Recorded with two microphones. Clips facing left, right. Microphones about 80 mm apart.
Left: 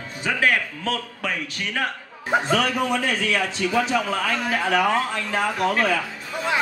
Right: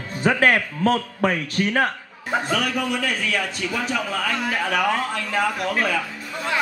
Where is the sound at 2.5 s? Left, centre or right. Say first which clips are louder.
Left 2 dB; left.